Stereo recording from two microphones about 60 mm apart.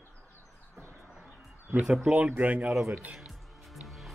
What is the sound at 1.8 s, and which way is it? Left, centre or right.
Speech, centre.